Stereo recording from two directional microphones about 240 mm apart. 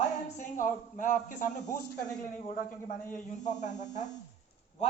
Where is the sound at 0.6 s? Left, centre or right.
Left.